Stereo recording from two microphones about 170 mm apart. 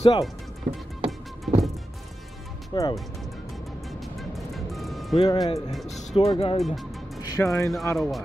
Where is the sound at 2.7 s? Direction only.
20° left (ahead or behind).